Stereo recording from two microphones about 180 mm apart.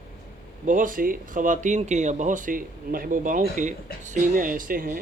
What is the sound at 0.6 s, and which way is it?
Speech, 45° right (ahead or behind).